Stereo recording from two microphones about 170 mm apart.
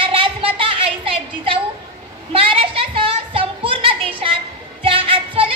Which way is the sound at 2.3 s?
35° right (ahead or behind).